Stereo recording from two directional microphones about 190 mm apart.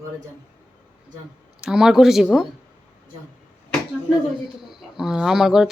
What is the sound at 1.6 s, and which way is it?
Speech, 5° right (ahead or behind).